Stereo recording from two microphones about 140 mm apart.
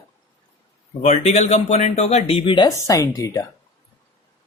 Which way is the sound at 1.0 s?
55° left (ahead or behind).